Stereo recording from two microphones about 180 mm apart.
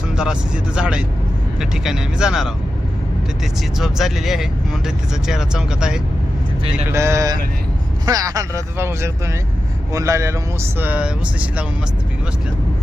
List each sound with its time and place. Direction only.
0.2 s speech: 5° right (ahead or behind)
3.8 s speech: centre (ahead or behind)
6.9 s speech: 15° right (ahead or behind)